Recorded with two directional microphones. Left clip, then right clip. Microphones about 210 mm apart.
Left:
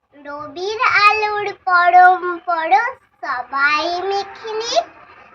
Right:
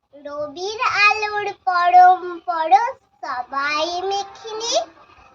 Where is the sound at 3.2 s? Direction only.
30° right (ahead or behind).